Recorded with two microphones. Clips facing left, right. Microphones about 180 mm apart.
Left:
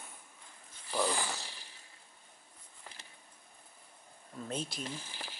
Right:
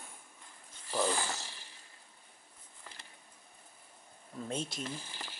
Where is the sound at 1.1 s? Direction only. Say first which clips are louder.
Even; 15° left (ahead or behind).